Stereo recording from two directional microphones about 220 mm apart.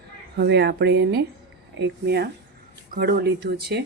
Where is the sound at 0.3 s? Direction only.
50° right (ahead or behind).